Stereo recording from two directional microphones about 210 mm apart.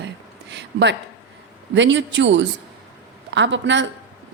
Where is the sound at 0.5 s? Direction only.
55° right (ahead or behind).